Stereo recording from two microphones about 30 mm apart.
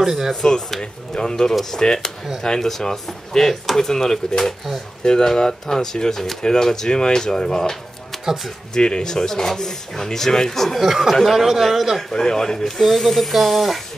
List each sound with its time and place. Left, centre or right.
0.0 s speech: centre
1.1 s speech: centre
8.7 s speech: left
9.1 s speech: centre
10.8 s speech: centre
12.1 s speech: centre
12.7 s speech: centre